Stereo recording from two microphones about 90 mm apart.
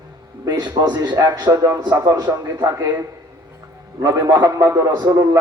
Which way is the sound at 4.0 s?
40° right (ahead or behind).